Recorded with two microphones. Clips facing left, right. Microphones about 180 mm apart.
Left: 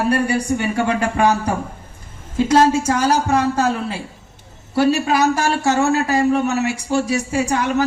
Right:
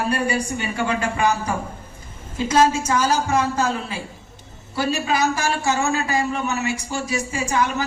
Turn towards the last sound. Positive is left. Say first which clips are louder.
# left 4 dB
turn(degrees=60)  # may be behind; listen again after turning